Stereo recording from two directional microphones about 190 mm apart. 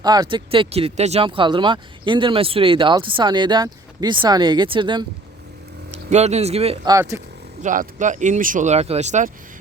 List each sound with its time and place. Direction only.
0.0 s speech: 20° right (ahead or behind)
5.9 s speech: 35° right (ahead or behind)
6.8 s speech: 15° right (ahead or behind)
7.6 s speech: 40° right (ahead or behind)